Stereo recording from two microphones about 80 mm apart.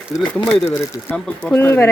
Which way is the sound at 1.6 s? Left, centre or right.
Left.